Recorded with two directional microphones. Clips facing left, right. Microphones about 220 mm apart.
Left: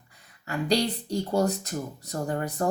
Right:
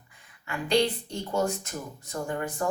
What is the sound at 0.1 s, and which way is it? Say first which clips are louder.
Speech: left 3 dB; 40° left (ahead or behind).